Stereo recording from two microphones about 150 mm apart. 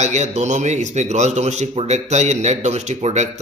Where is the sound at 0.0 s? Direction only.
50° right (ahead or behind).